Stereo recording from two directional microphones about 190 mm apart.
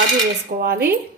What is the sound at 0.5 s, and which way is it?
Speech, 45° right (ahead or behind).